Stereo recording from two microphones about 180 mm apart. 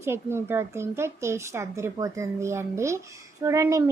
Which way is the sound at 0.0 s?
15° right (ahead or behind).